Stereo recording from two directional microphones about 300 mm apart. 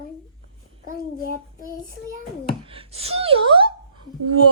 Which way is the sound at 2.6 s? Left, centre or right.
Centre.